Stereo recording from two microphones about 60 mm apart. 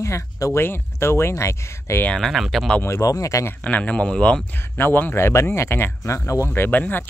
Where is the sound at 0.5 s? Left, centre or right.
Left.